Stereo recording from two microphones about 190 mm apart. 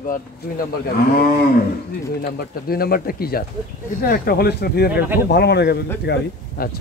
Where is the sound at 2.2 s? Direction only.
50° left (ahead or behind).